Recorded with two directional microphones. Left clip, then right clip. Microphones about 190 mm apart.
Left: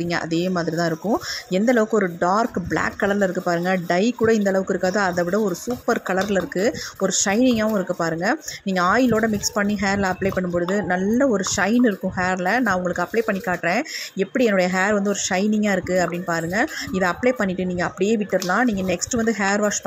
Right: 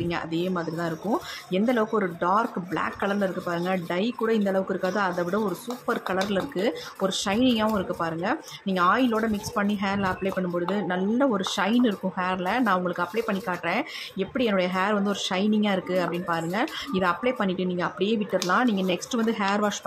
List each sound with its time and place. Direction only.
0.1 s speech: 25° left (ahead or behind)